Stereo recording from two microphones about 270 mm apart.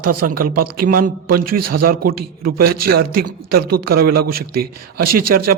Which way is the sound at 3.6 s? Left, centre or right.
Right.